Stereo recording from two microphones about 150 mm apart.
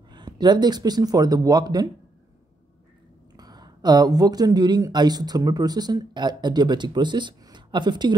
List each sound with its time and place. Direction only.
0.1 s speech: 30° right (ahead or behind)
3.3 s speech: 25° right (ahead or behind)